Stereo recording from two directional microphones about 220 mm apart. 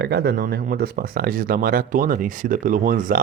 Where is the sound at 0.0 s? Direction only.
50° right (ahead or behind).